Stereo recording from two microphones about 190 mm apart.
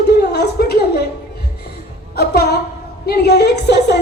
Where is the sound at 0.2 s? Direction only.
55° left (ahead or behind).